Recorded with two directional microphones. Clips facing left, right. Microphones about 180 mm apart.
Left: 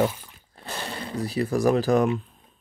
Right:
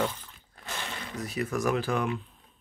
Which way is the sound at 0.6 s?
35° left (ahead or behind).